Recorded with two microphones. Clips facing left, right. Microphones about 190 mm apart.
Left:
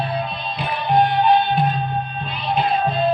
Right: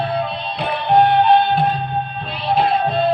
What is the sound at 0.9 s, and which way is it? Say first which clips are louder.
Music: right 3 dB; 70° right (ahead or behind).